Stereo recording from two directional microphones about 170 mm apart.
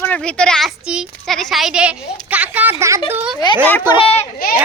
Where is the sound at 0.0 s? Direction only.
10° left (ahead or behind); by 3.0 s 15° right (ahead or behind).